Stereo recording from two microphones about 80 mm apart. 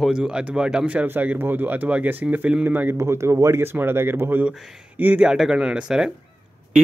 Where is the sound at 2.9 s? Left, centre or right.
Right.